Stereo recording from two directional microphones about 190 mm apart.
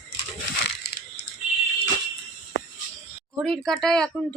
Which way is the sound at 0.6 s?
60° left (ahead or behind).